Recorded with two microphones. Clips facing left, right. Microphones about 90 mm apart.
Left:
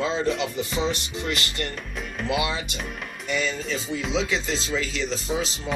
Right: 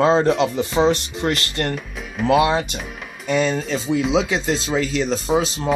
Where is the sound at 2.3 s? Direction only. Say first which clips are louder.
Right 10 dB; 45° right (ahead or behind).